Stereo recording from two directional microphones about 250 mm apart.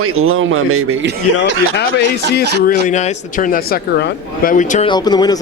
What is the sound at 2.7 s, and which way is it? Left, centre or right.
Speech, left.